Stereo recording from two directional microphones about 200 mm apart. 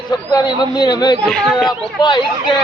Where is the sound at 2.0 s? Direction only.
20° left (ahead or behind).